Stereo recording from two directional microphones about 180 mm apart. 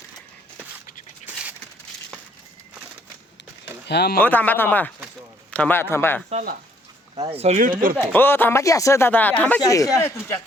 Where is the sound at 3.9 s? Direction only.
65° left (ahead or behind).